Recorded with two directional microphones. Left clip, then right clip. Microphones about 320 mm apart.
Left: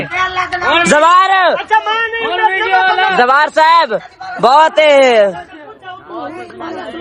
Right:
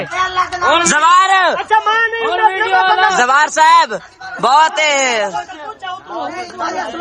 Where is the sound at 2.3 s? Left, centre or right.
Centre.